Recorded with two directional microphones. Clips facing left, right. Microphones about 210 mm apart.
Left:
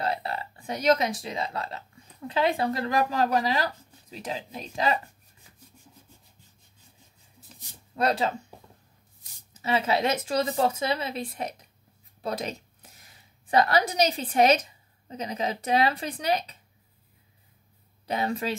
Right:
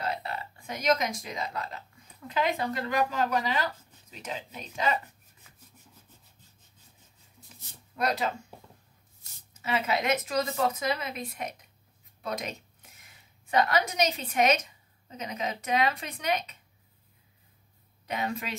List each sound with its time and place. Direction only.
0.0 s speech: 35° left (ahead or behind)
7.9 s speech: 30° left (ahead or behind)
9.6 s a woman's voice: 30° left (ahead or behind)
18.0 s speech: 35° left (ahead or behind)